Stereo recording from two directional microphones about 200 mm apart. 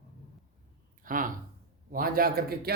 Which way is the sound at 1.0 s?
40° right (ahead or behind).